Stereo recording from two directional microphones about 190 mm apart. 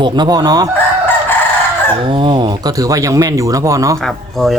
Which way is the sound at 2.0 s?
25° right (ahead or behind).